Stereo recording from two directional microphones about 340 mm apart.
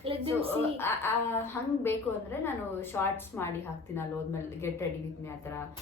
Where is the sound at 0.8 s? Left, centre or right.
Centre.